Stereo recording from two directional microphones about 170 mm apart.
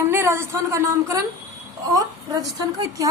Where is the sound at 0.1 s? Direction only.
15° right (ahead or behind).